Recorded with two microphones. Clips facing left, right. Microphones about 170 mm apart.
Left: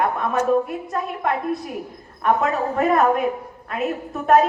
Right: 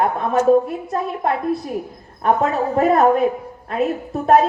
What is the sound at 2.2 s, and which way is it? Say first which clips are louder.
A woman's voice: right 2 dB; 30° right (ahead or behind).